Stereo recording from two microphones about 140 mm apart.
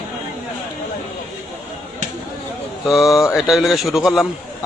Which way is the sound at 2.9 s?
Centre (ahead or behind).